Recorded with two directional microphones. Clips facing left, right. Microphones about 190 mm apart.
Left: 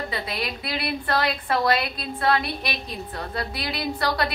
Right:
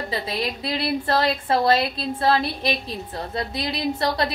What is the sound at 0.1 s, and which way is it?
A woman's voice, 25° right (ahead or behind).